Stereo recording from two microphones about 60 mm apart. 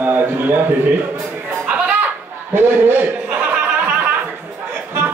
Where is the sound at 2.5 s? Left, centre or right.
Right.